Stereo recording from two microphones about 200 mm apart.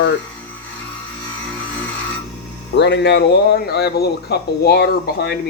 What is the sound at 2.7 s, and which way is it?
Speech, 60° left (ahead or behind).